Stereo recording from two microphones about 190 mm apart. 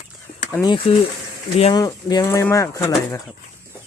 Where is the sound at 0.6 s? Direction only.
25° left (ahead or behind).